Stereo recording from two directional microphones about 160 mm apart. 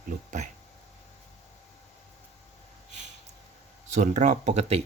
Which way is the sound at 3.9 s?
50° right (ahead or behind).